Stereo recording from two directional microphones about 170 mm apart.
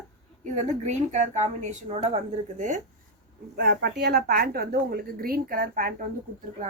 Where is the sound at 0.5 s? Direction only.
45° right (ahead or behind).